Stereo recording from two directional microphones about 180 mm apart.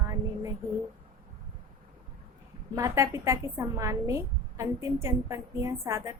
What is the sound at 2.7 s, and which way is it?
A woman's voice, 15° right (ahead or behind).